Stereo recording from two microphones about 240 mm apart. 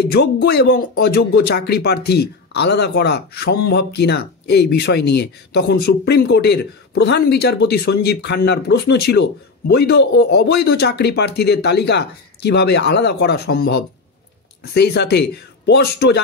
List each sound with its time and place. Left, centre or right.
0.1 s speech: left